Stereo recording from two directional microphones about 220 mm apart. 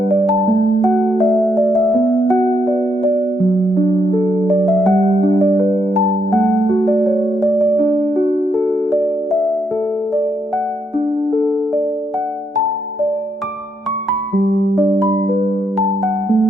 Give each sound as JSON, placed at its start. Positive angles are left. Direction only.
{"t": 1.3, "sound": "music", "side_deg": 5}
{"t": 4.4, "sound": "music", "side_deg": 0}
{"t": 8.1, "sound": "music", "side_deg": 0}
{"t": 15.0, "sound": "music", "side_deg": -15}